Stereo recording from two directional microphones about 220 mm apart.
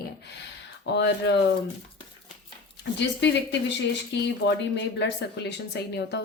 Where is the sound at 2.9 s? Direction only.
50° left (ahead or behind).